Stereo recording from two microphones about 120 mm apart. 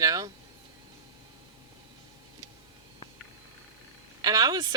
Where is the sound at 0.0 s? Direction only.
30° right (ahead or behind).